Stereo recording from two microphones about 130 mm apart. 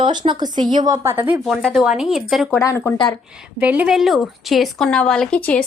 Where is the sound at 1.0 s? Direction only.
15° right (ahead or behind).